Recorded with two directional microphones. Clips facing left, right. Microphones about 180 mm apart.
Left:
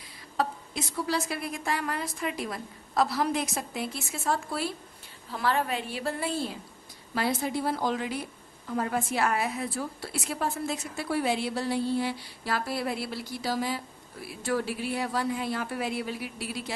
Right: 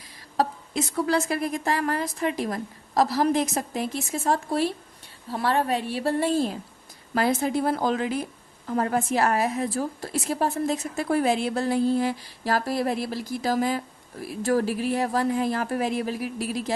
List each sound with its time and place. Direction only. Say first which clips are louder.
0.9 s a woman's voice: right 6 dB; 50° right (ahead or behind)
7.1 s a woman's voice: right 5 dB; 50° right (ahead or behind)